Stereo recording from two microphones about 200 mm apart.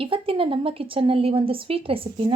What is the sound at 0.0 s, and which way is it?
A woman's voice, 25° right (ahead or behind).